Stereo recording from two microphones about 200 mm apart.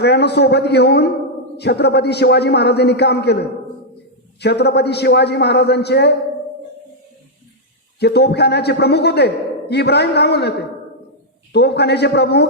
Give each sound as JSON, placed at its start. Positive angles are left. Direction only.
{"t": 0.0, "sound": "a man's voice", "side_deg": 55}
{"t": 4.4, "sound": "a man's voice", "side_deg": 55}
{"t": 7.9, "sound": "a man's voice", "side_deg": 55}
{"t": 11.5, "sound": "a man's voice", "side_deg": 55}